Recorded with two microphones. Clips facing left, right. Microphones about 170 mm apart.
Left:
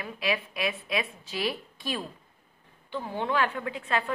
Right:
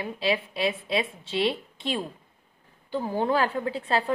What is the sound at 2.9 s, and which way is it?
A woman's voice, 40° right (ahead or behind).